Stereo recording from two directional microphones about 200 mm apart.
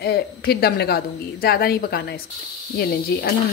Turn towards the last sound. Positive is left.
turn(degrees=50)  # may be behind; listen again after turning